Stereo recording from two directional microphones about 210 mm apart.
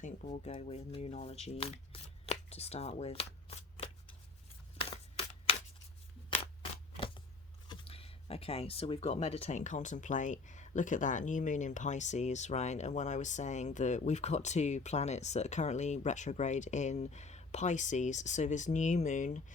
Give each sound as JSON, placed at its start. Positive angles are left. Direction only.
{"t": 0.0, "sound": "speech", "side_deg": 35}
{"t": 4.8, "sound": "a sound", "side_deg": 25}
{"t": 7.7, "sound": "speech", "side_deg": 25}